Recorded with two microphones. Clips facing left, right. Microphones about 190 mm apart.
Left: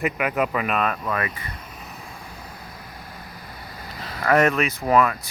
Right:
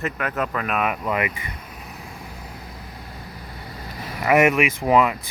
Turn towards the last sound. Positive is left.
turn(degrees=-15)  # may be behind; listen again after turning